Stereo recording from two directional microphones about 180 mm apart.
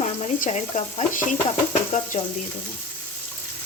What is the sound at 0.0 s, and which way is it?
Stir, 45° left (ahead or behind).